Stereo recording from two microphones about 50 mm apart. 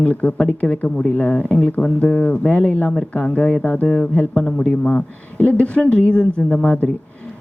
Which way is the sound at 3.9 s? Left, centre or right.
Centre.